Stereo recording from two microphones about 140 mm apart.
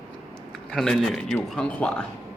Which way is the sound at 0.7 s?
5° left (ahead or behind).